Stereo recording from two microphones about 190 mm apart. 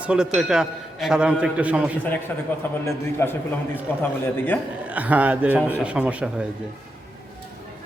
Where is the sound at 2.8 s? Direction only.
10° left (ahead or behind).